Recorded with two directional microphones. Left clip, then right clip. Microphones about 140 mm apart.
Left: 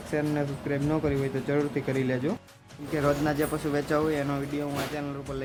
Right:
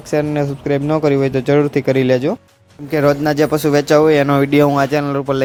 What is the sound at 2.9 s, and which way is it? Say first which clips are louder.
Speech: right 12 dB; 80° right.